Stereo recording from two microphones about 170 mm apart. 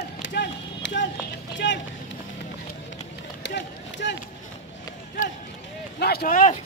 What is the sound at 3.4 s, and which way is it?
Run, 90° left.